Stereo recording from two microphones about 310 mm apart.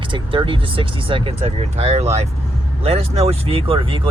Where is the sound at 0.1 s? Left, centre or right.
Centre.